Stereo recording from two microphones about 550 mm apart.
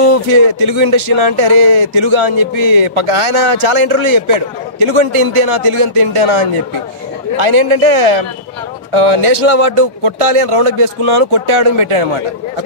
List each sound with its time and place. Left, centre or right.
0.0 s speech: right